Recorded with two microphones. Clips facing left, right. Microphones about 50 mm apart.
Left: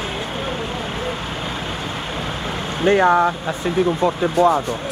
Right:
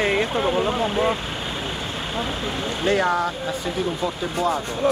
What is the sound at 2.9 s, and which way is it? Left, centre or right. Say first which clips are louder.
Speech: left 7 dB; left.